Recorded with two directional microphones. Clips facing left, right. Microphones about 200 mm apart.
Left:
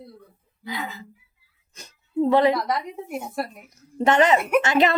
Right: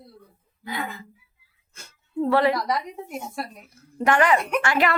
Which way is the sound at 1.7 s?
20° left (ahead or behind).